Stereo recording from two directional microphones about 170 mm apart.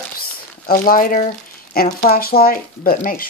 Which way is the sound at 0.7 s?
55° left (ahead or behind).